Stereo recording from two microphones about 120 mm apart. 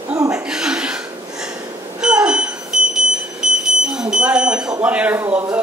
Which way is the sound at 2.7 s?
5° right (ahead or behind).